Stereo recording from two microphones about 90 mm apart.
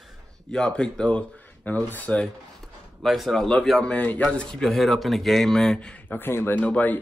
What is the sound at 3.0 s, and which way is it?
Speech, centre (ahead or behind).